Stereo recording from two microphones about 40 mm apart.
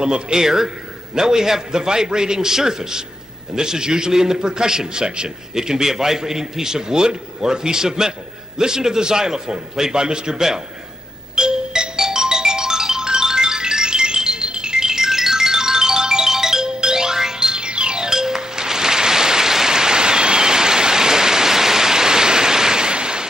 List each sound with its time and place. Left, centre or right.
0.0 s a man's voice: centre
11.3 s music: centre